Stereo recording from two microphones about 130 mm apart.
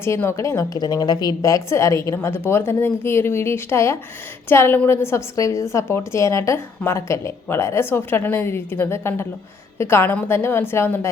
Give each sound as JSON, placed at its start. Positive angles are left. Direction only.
{"t": 0.0, "sound": "a woman's voice", "side_deg": 20}